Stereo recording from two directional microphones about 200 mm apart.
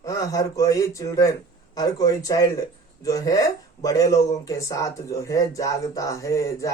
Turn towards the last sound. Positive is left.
turn(degrees=15)  # may be behind; listen again after turning